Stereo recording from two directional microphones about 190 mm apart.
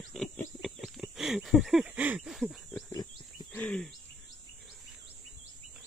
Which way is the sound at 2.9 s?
20° left (ahead or behind).